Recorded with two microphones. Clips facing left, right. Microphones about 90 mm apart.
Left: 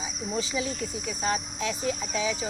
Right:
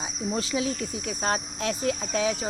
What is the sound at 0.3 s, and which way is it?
Speech, 60° right (ahead or behind).